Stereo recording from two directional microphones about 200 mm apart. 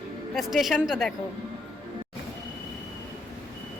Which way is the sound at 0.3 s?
Centre (ahead or behind).